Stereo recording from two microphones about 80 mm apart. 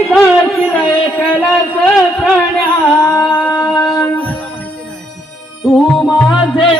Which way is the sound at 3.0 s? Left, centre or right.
Left.